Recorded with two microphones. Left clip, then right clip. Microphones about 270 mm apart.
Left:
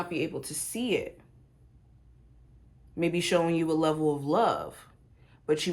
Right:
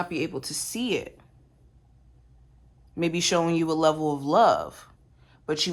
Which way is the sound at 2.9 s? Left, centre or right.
Centre.